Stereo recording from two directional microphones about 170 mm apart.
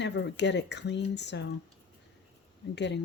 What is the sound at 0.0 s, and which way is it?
Speech, 90° left.